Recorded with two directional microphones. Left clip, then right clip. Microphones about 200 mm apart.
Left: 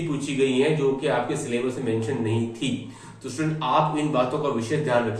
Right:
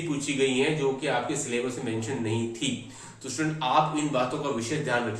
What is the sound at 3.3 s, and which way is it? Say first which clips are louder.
Speech: left 2 dB; 20° right (ahead or behind).